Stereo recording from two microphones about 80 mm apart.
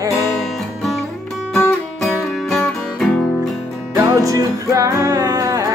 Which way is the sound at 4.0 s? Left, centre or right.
Right.